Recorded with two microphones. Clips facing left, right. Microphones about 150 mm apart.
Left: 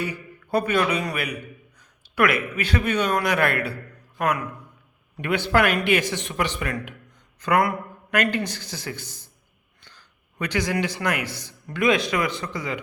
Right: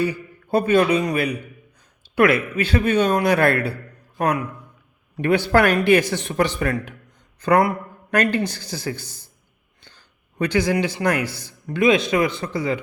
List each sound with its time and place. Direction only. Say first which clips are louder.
0.0 s speech: right 7 dB; 30° right (ahead or behind)
5.1 s a man's voice: right 4 dB; 35° right (ahead or behind)